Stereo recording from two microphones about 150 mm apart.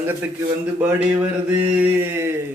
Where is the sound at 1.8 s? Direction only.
15° right (ahead or behind).